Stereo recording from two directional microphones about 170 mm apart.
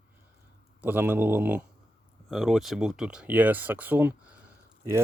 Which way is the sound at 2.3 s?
Centre (ahead or behind).